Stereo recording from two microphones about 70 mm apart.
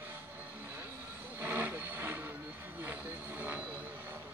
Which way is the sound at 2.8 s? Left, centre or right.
Right.